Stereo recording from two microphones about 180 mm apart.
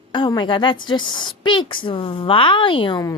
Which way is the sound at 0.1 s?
25° left (ahead or behind).